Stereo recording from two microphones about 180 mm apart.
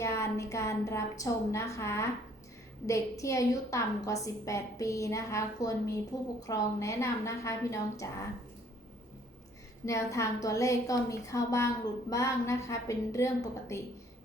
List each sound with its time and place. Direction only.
0.0 s a woman's voice: 15° left (ahead or behind)
9.8 s a woman's voice: 15° left (ahead or behind)